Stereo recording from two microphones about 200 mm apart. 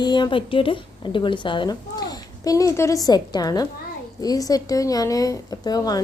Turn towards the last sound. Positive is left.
turn(degrees=20)  # may be behind; listen again after turning